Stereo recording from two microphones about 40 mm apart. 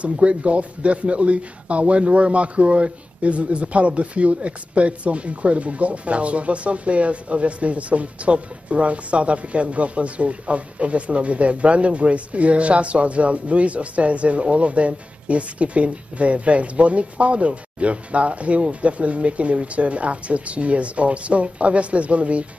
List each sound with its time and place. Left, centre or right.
0.0 s speech: right